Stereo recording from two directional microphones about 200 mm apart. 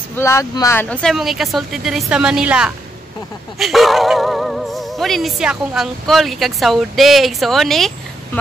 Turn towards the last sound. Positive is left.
turn(degrees=0)  # may be behind; listen again after turning